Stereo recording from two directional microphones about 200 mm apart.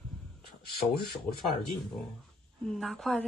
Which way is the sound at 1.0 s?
50° left (ahead or behind).